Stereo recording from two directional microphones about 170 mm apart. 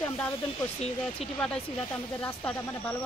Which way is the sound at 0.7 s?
40° left (ahead or behind).